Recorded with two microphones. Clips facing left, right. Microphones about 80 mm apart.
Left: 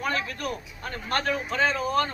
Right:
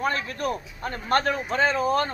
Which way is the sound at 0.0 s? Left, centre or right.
Right.